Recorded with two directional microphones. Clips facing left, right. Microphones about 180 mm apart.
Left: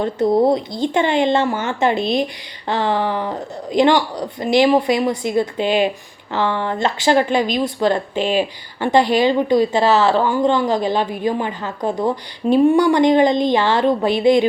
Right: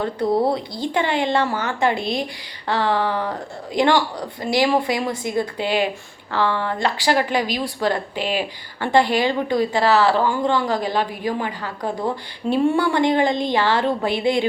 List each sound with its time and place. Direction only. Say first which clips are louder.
0.0 s speech: left 4 dB; 20° left (ahead or behind)